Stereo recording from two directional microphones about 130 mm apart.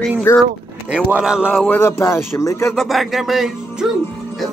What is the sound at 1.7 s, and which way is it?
Speech, 20° left (ahead or behind).